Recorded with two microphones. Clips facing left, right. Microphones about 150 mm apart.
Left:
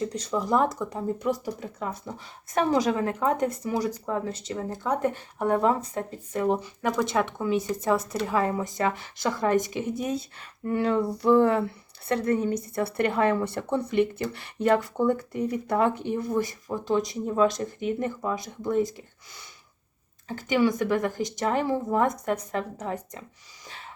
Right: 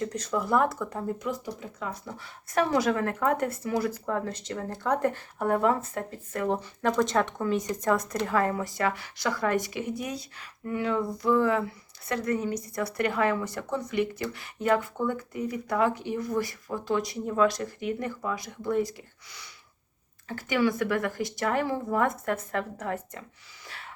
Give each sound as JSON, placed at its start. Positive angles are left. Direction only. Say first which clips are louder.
{"t": 0.0, "sound": "speech", "louder": "left 1 dB", "side_deg": 10}
{"t": 1.3, "sound": "speech", "louder": "left 5 dB", "side_deg": 40}
{"t": 2.0, "sound": "speech", "louder": "left 2 dB", "side_deg": 20}
{"t": 8.3, "sound": "speech", "louder": "left 1 dB", "side_deg": 20}
{"t": 10.8, "sound": "speech", "louder": "left 3 dB", "side_deg": 35}
{"t": 20.2, "sound": "speech", "louder": "left 2 dB", "side_deg": 20}
{"t": 23.6, "sound": "gasp", "louder": "left 1 dB", "side_deg": 20}